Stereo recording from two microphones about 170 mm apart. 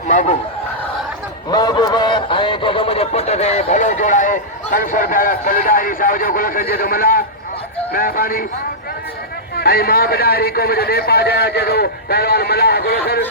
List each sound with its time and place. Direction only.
0.1 s speech: 45° left (ahead or behind)
1.5 s a man's voice: 25° left (ahead or behind); by 8.4 s 60° left (ahead or behind)
9.6 s a man's voice: 65° left (ahead or behind)